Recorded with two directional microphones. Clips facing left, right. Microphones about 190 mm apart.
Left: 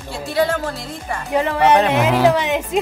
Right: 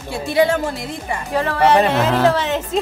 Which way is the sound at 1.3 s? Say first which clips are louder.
Left 1 dB; 20° left (ahead or behind).